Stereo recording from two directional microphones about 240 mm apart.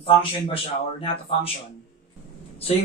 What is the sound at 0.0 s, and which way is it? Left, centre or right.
A man's voice, left.